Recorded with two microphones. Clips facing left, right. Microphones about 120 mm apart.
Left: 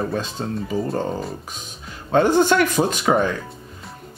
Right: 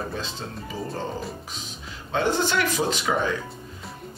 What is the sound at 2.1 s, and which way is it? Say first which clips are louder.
Speech: left 8 dB; 50° left (ahead or behind).